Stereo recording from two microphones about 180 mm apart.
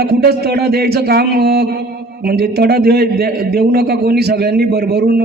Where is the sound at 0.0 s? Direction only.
65° right (ahead or behind).